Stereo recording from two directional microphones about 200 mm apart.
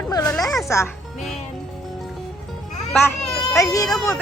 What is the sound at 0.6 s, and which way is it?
Speech, 15° left (ahead or behind).